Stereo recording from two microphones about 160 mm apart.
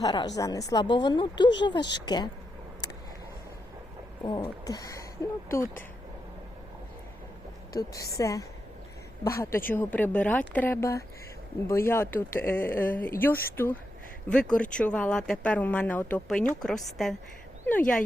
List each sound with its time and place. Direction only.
0.0 s speech: 25° left (ahead or behind)
4.2 s speech: 25° left (ahead or behind)
8.1 s a woman's voice: 20° left (ahead or behind)